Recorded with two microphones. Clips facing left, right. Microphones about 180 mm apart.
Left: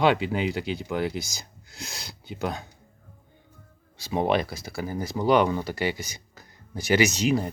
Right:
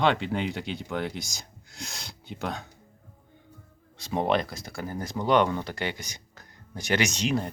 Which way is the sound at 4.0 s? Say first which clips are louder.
Left 2 dB; 5° left (ahead or behind).